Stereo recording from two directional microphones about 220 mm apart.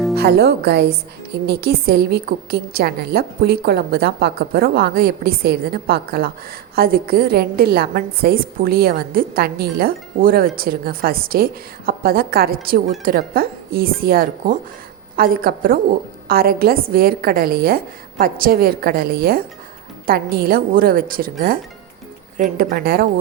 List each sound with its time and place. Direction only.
0.2 s a woman's voice: 45° right (ahead or behind)